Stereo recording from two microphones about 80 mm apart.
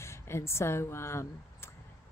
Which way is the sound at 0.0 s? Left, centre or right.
Left.